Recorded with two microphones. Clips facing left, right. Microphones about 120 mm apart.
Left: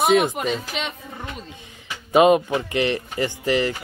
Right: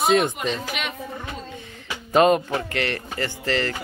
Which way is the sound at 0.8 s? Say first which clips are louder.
Left 2 dB; 30° left (ahead or behind).